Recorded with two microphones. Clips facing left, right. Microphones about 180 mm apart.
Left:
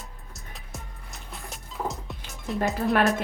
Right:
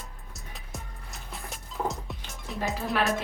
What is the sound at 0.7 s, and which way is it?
Music, centre (ahead or behind).